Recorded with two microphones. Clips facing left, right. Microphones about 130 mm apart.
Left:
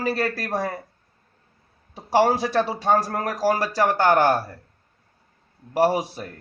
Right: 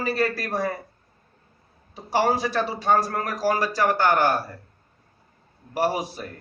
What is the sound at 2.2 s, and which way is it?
A man's voice, 35° left (ahead or behind).